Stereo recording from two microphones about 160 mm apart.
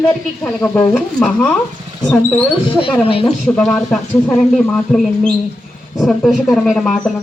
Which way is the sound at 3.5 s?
5° left (ahead or behind).